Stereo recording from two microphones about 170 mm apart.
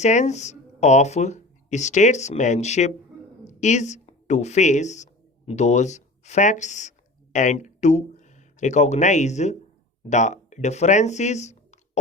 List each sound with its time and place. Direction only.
0.0 s speech: 45° left (ahead or behind)